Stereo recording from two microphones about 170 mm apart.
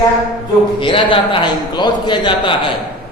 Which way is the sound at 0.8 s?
30° left (ahead or behind).